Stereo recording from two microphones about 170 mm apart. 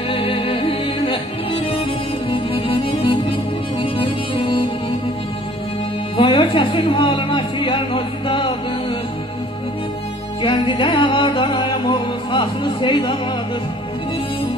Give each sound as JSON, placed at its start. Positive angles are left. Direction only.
{"t": 0.1, "sound": "music", "side_deg": 30}
{"t": 2.3, "sound": "music", "side_deg": 30}
{"t": 6.1, "sound": "music", "side_deg": 30}
{"t": 10.4, "sound": "music", "side_deg": 30}